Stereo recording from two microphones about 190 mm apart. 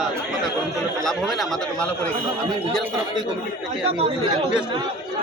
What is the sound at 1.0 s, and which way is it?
Speech, centre (ahead or behind).